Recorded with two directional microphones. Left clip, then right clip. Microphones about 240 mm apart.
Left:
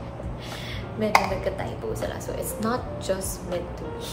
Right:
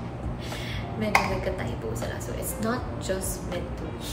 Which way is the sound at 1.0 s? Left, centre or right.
Centre.